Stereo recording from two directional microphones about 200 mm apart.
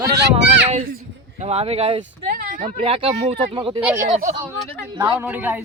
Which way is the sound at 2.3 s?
40° right (ahead or behind).